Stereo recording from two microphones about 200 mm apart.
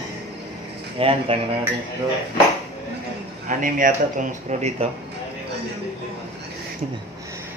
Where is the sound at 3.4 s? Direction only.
40° right (ahead or behind).